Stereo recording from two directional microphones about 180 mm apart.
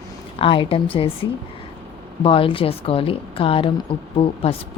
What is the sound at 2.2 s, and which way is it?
A woman's voice, 30° left (ahead or behind).